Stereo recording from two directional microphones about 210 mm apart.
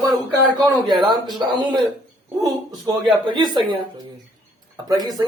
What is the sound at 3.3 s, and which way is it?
Speech, 20° right (ahead or behind).